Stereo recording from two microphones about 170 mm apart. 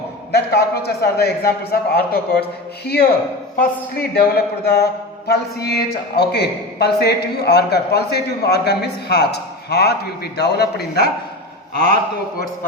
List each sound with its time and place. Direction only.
0.3 s a man's voice: 70° left (ahead or behind)